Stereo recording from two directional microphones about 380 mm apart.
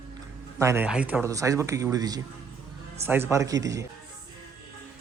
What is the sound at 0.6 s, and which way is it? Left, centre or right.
Speech, centre.